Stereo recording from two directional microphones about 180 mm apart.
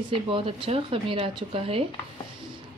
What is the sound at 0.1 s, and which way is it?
A woman's voice, 30° right (ahead or behind).